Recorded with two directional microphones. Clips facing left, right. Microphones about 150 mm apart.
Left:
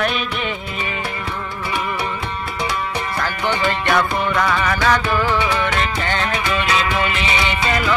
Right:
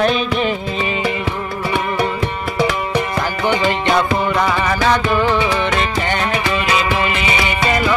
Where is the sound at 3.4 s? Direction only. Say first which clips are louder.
Right 3 dB; 20° right (ahead or behind).